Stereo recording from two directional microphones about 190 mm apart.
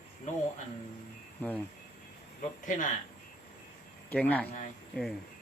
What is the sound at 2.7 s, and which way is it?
Speech, 45° left (ahead or behind).